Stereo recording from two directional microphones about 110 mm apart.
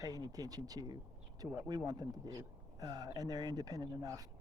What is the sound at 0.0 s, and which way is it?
A man's voice, 35° right (ahead or behind).